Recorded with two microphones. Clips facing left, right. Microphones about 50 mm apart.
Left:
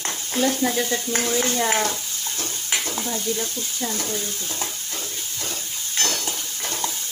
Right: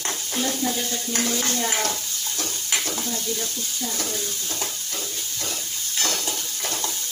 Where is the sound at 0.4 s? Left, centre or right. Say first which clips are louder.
Left 5 dB; left.